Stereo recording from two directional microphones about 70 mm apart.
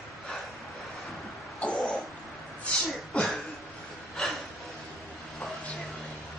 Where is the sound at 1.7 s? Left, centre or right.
Centre.